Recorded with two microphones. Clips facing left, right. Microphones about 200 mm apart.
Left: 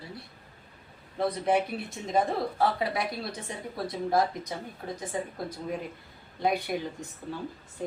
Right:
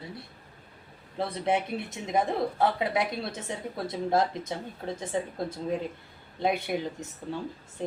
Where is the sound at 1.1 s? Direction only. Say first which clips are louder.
Left 2 dB; 25° right (ahead or behind).